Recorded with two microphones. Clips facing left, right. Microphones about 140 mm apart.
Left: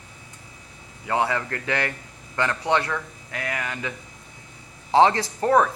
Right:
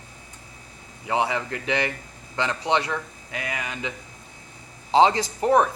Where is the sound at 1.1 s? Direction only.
20° right (ahead or behind).